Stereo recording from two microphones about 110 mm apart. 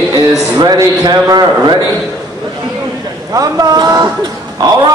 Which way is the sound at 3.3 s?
35° right (ahead or behind).